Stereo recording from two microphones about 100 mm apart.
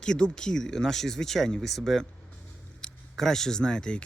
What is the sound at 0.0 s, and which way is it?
Speech, 10° left (ahead or behind).